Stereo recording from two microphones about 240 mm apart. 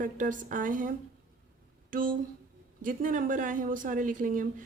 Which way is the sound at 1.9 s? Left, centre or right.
Right.